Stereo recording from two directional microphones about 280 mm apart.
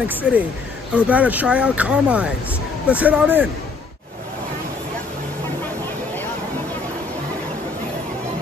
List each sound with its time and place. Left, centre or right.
0.1 s speech: centre